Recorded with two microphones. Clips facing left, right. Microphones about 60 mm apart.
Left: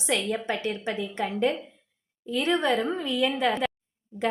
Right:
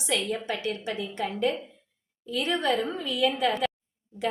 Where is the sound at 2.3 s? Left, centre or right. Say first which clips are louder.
Left 2 dB; left.